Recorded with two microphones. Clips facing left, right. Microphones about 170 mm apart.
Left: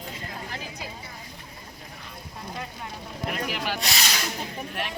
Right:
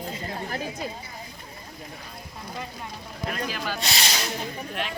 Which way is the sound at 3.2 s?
10° left (ahead or behind).